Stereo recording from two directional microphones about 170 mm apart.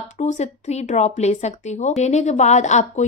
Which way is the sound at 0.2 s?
40° left (ahead or behind).